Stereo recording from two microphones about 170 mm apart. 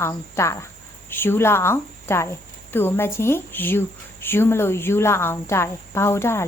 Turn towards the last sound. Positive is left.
turn(degrees=15)  # may be behind; listen again after turning